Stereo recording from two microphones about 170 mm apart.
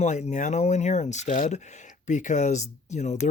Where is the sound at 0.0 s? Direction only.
45° left (ahead or behind).